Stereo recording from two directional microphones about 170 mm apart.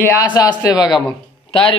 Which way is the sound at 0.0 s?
20° left (ahead or behind).